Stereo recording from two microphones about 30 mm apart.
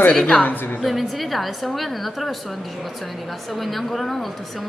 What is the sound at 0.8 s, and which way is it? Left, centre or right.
A woman's voice, centre.